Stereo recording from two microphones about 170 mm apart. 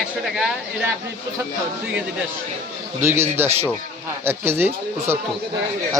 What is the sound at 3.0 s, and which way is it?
Speech, 15° right (ahead or behind).